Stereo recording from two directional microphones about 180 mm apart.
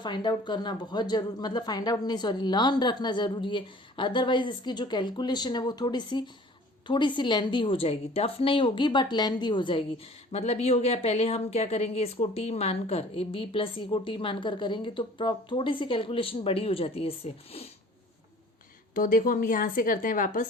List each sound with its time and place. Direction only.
0.0 s a woman's voice: 25° left (ahead or behind)
18.9 s a woman's voice: 50° left (ahead or behind)